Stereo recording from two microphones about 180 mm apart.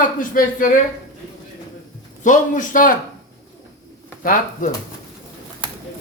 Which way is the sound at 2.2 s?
45° left (ahead or behind).